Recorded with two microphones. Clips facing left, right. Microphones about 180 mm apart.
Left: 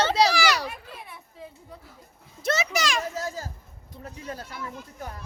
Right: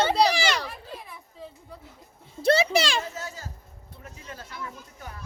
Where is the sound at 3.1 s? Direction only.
40° left (ahead or behind).